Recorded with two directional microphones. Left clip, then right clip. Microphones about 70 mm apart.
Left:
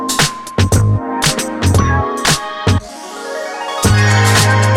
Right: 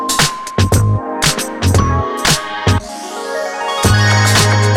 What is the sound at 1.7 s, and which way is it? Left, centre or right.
Music, centre.